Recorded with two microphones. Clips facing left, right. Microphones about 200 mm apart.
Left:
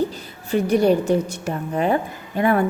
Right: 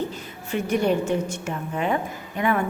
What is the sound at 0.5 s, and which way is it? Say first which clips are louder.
A woman's voice: left 5 dB; 35° left (ahead or behind).